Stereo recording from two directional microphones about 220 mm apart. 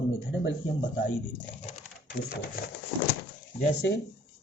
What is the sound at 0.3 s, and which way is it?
Speech, 55° left (ahead or behind).